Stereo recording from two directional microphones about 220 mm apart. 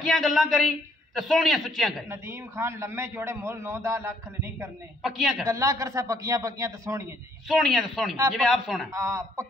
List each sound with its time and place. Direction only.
0.0 s a man's voice: centre (ahead or behind)
2.0 s a man's voice: 10° right (ahead or behind)
5.0 s a man's voice: centre (ahead or behind)
5.5 s a man's voice: 15° right (ahead or behind)
7.4 s a man's voice: centre (ahead or behind)
8.9 s a man's voice: 15° right (ahead or behind)